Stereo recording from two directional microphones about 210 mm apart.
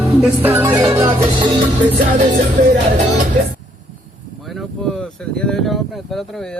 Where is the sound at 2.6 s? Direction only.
40° right (ahead or behind).